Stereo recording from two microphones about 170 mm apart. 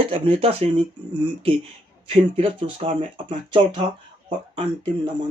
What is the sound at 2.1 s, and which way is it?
Speech, 30° right (ahead or behind).